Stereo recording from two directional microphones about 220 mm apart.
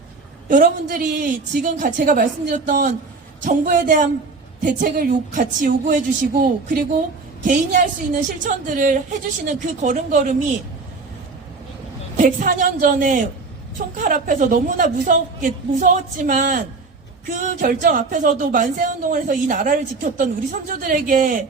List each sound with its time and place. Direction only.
0.4 s speech: 40° right (ahead or behind)
12.1 s speech: 40° right (ahead or behind)